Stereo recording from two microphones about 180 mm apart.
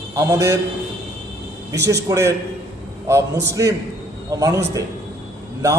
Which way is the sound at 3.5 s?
20° right (ahead or behind).